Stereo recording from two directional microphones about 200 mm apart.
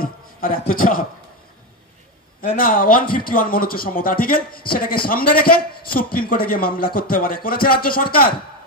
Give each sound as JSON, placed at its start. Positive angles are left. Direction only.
{"t": 0.0, "sound": "a man's voice", "side_deg": 45}
{"t": 2.4, "sound": "a man's voice", "side_deg": 45}